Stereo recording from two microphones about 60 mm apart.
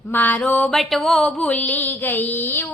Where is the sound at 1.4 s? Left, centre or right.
Left.